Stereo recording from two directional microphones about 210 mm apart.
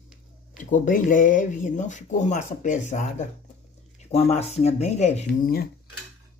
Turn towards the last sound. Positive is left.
turn(degrees=30)  # may be behind; listen again after turning